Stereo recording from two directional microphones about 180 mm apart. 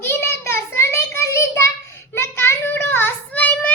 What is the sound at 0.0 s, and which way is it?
Child singing, 15° left (ahead or behind).